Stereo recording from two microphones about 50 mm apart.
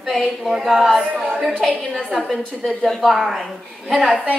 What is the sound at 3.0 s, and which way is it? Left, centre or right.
Speech, centre.